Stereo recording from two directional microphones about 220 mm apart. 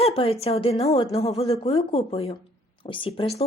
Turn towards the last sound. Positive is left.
turn(degrees=25)  # may be behind; listen again after turning